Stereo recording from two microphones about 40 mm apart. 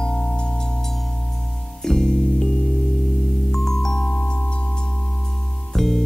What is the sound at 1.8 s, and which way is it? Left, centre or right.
Music, centre.